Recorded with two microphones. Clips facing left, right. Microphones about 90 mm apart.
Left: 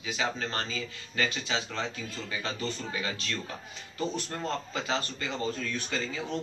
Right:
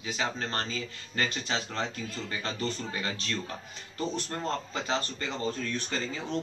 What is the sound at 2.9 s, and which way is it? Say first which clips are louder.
Speech: even; 35° right (ahead or behind).